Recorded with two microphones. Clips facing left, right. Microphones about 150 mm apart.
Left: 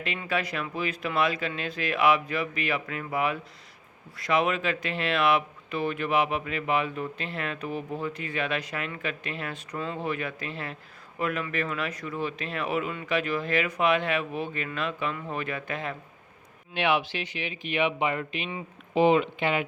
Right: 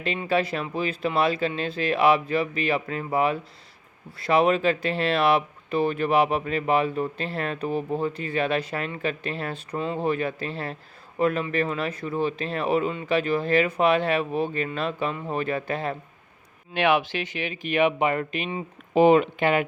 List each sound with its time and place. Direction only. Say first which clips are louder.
0.0 s speech: right 6 dB; 30° right (ahead or behind)
16.7 s speech: right 4 dB; 50° right (ahead or behind)